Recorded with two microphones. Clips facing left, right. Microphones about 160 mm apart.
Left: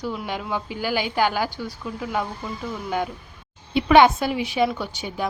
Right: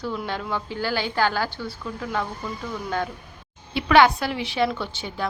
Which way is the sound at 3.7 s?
20° left (ahead or behind).